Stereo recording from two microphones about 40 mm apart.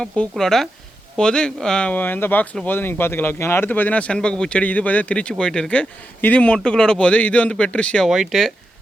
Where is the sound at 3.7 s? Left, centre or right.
Left.